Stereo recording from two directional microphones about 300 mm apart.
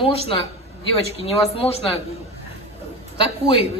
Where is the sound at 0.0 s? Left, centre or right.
Centre.